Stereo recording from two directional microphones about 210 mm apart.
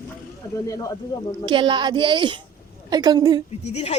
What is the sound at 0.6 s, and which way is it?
Speech, 15° left (ahead or behind).